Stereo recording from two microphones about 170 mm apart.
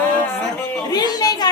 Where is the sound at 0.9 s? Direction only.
25° left (ahead or behind).